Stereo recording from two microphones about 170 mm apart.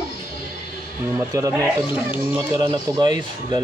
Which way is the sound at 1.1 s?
20° right (ahead or behind).